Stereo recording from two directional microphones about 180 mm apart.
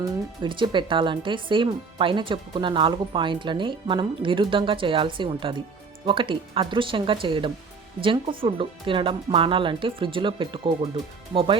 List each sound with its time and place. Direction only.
0.0 s speech: 25° right (ahead or behind)